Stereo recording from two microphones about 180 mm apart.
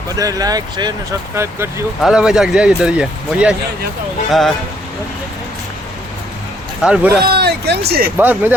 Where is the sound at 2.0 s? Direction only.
5° right (ahead or behind).